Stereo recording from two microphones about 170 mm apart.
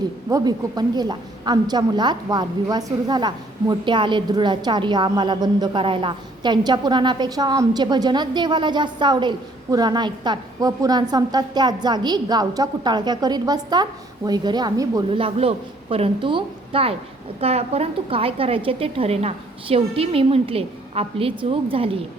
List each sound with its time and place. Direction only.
0.3 s a woman's voice: 20° right (ahead or behind)
15.2 s a woman's voice: 35° right (ahead or behind)